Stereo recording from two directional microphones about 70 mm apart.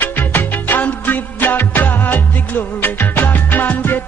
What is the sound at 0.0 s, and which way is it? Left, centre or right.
Music, left.